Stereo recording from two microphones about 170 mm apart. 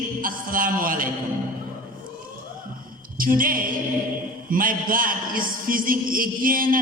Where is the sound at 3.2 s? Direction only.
55° right (ahead or behind).